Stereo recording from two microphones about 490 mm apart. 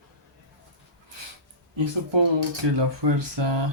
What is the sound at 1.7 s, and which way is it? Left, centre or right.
Speech, right.